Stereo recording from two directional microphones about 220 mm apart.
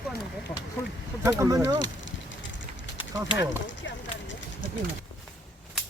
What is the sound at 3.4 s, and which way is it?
Speech, 55° left (ahead or behind).